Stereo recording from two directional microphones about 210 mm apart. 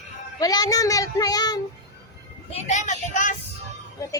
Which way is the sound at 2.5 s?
35° left (ahead or behind).